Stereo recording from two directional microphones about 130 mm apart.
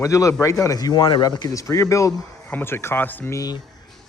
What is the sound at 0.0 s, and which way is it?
Speech, 25° left (ahead or behind).